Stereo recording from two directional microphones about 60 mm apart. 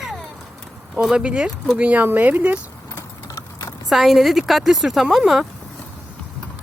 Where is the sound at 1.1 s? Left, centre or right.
Centre.